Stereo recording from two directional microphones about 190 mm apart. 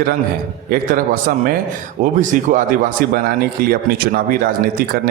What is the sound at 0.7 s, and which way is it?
Speech, 50° right (ahead or behind).